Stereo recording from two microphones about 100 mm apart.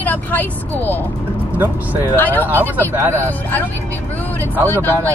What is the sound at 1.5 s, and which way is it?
Speech, 20° right (ahead or behind).